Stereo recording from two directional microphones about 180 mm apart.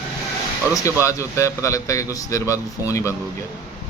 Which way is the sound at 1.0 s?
15° left (ahead or behind).